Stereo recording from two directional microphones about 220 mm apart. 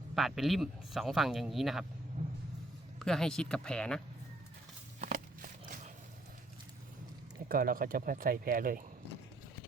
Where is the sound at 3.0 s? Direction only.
5° left (ahead or behind).